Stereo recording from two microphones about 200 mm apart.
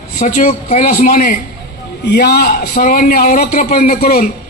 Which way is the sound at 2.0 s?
55° left (ahead or behind).